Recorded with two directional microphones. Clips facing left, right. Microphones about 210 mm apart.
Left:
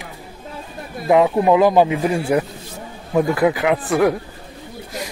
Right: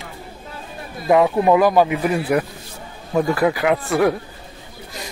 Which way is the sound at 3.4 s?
20° left (ahead or behind).